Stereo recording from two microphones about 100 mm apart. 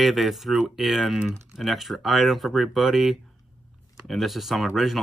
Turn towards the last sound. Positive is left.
turn(degrees=0)  # may be behind; listen again after turning